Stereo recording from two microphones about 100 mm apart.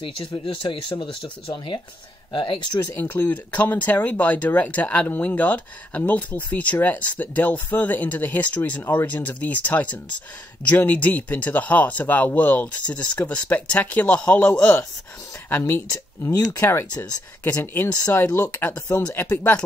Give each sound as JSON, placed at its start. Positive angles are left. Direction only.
{"t": 0.0, "sound": "speech", "side_deg": 60}
{"t": 3.0, "sound": "speech", "side_deg": 15}
{"t": 15.5, "sound": "speech", "side_deg": 25}
{"t": 16.9, "sound": "speech", "side_deg": 40}
{"t": 17.4, "sound": "speech", "side_deg": 20}